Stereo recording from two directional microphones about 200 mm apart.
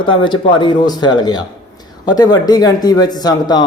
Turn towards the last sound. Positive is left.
turn(degrees=20)  # may be behind; listen again after turning